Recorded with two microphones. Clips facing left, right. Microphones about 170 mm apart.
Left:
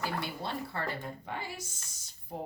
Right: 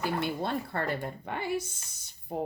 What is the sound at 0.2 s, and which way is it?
A woman's voice, 55° right (ahead or behind).